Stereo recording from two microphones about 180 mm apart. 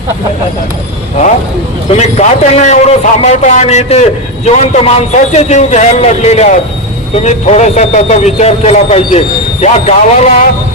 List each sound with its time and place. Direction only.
1.9 s a man's voice: 40° left (ahead or behind)